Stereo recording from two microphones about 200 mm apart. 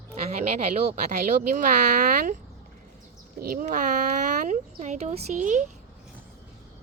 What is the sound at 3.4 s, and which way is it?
Speech, 45° right (ahead or behind).